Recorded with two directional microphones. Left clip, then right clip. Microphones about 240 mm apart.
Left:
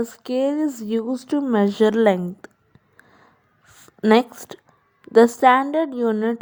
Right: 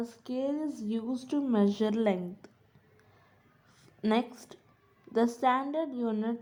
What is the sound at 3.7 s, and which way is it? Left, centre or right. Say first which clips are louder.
A woman's voice: left 13 dB; left.